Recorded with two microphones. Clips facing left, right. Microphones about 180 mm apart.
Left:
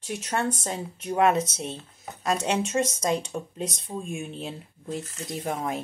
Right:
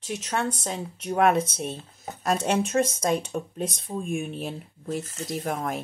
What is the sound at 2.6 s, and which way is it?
Speech, 60° right (ahead or behind).